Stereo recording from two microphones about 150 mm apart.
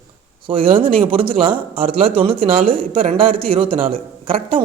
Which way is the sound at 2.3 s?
70° right (ahead or behind).